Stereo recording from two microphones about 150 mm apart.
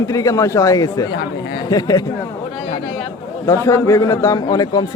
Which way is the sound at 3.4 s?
20° left (ahead or behind).